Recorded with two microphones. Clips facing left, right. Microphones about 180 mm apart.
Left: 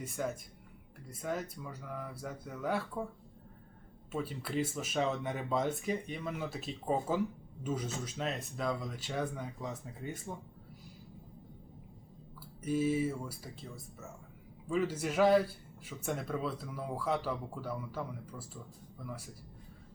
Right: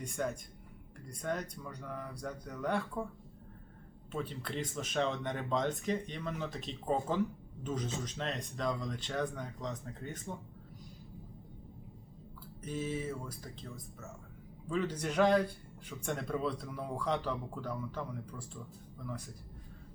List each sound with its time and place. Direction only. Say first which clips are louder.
0.2 s speech: right 1 dB; 5° left (ahead or behind)
4.1 s speech: left 3 dB; 5° left (ahead or behind)
12.6 s speech: left 6 dB; 10° left (ahead or behind)